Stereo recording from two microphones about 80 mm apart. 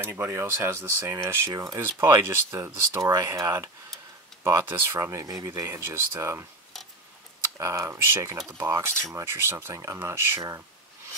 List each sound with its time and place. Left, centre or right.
0.0 s speech: right
7.5 s speech: right